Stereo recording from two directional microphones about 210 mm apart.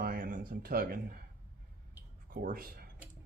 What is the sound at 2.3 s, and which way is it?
Speech, 45° right (ahead or behind).